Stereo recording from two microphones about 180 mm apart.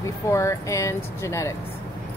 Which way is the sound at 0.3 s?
15° left (ahead or behind).